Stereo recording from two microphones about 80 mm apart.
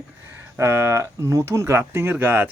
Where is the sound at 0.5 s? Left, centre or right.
Right.